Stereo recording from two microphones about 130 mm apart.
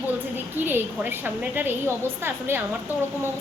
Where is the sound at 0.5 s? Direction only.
15° right (ahead or behind).